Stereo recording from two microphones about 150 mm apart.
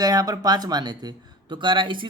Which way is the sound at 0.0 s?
25° right (ahead or behind).